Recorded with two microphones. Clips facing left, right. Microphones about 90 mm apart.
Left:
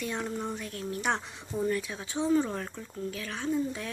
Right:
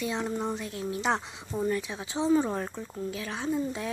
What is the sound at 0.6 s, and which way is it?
A woman's voice, 10° right (ahead or behind).